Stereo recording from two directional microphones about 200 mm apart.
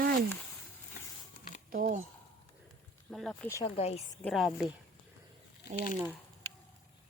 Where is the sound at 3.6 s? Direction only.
30° left (ahead or behind).